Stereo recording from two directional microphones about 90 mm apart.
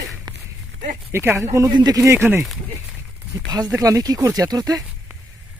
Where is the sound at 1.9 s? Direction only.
30° right (ahead or behind).